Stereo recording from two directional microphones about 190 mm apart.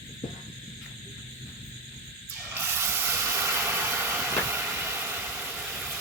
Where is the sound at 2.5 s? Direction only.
10° right (ahead or behind).